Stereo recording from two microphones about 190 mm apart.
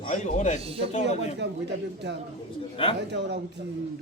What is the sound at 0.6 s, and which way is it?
Speech, 30° right (ahead or behind).